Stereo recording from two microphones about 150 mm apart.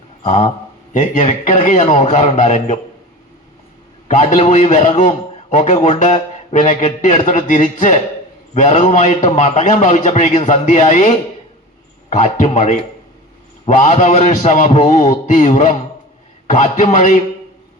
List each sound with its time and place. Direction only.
0.3 s a man's voice: 50° left (ahead or behind)
4.1 s a man's voice: 50° left (ahead or behind)